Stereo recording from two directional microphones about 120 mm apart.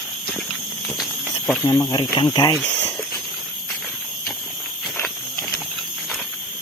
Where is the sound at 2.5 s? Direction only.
5° left (ahead or behind).